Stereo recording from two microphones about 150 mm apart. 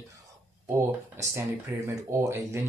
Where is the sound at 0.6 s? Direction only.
15° right (ahead or behind).